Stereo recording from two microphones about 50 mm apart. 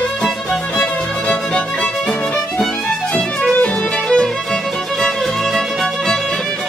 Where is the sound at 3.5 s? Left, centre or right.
Centre.